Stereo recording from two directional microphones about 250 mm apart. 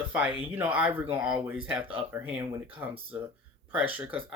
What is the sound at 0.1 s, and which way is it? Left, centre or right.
Speech, centre.